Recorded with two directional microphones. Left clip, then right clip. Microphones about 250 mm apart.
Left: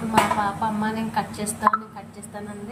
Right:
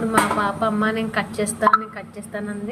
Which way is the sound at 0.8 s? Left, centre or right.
Centre.